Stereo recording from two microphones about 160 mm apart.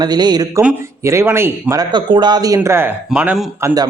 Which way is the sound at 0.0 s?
25° right (ahead or behind).